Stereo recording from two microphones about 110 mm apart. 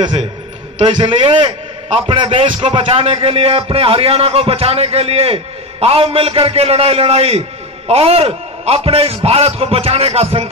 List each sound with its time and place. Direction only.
0.8 s a man's voice: 50° right (ahead or behind)
2.0 s music: 50° right (ahead or behind); by 10.5 s 70° right (ahead or behind)